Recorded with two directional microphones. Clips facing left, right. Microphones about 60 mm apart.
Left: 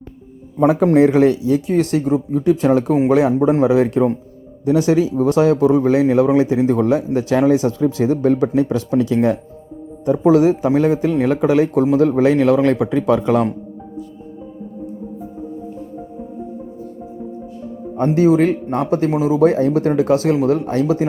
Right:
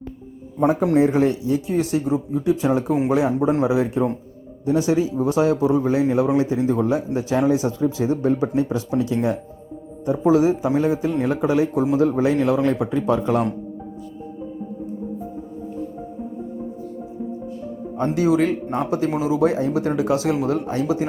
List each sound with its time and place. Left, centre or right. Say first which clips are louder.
0.9 s a man's voice: left 5 dB; left
10.1 s speech: left 4 dB; left
11.9 s speech: left 5 dB; left
12.6 s a man's voice: left 4 dB; left
17.9 s speech: left 5 dB; left